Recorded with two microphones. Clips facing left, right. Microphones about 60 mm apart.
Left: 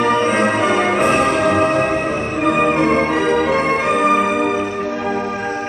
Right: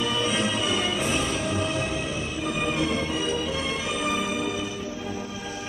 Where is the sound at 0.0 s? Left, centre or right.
Left.